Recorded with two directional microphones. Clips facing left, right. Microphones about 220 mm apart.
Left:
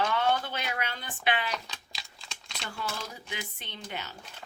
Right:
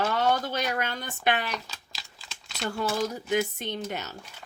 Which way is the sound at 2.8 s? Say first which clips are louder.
Right 10 dB; 45° right (ahead or behind).